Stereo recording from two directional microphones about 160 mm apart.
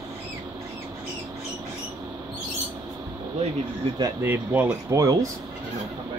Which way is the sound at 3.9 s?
15° right (ahead or behind).